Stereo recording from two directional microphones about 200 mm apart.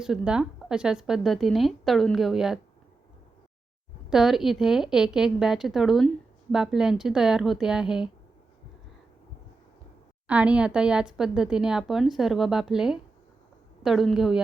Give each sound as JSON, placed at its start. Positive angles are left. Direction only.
{"t": 0.0, "sound": "speech", "side_deg": -5}
{"t": 4.1, "sound": "speech", "side_deg": 0}
{"t": 10.2, "sound": "speech", "side_deg": -5}